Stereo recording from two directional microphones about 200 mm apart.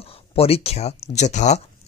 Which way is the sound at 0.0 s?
30° left (ahead or behind).